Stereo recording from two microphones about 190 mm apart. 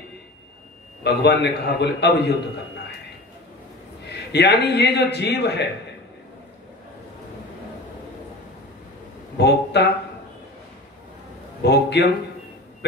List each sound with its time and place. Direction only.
1.0 s a man's voice: 60° left (ahead or behind)
4.3 s a man's voice: 60° left (ahead or behind)
9.4 s speech: 60° left (ahead or behind)
11.6 s a man's voice: 60° left (ahead or behind)